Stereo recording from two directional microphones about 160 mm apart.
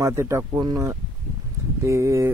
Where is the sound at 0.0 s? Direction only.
15° right (ahead or behind).